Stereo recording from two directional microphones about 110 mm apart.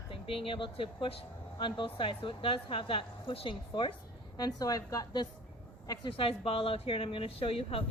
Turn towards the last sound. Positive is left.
turn(degrees=60)  # may be behind; listen again after turning